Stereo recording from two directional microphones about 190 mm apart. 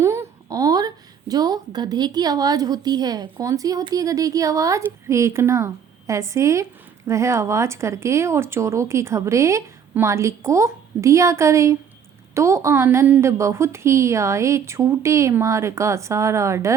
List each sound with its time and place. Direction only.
0.0 s speech: 15° right (ahead or behind)